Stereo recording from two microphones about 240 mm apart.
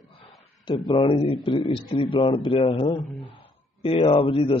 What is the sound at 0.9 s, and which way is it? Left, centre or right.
A man's voice, left.